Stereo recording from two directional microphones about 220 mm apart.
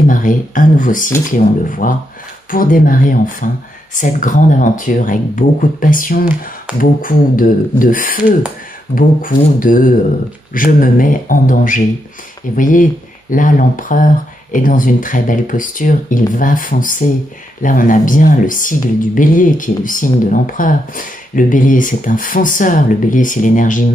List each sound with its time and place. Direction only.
0.0 s speech: 35° left (ahead or behind)